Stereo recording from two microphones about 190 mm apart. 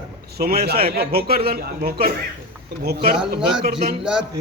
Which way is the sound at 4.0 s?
5° right (ahead or behind).